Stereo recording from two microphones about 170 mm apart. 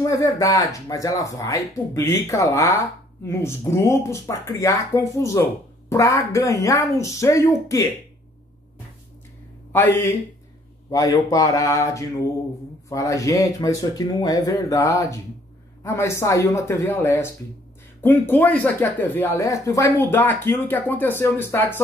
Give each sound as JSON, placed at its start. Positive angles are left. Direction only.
{"t": 0.0, "sound": "speech", "side_deg": 20}
{"t": 9.7, "sound": "a man's voice", "side_deg": 15}